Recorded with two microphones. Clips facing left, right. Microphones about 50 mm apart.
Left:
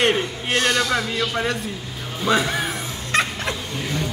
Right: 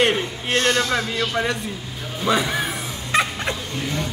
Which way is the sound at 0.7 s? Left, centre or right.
Right.